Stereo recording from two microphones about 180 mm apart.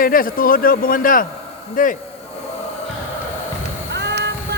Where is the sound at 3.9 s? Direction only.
75° right (ahead or behind).